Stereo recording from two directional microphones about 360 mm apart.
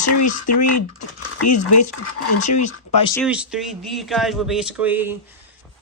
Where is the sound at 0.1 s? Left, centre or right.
Left.